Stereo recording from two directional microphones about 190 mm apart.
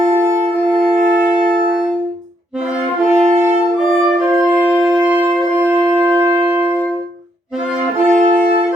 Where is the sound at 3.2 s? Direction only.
35° right (ahead or behind).